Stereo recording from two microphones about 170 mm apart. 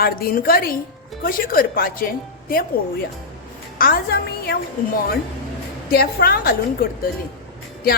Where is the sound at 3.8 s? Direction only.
60° left (ahead or behind).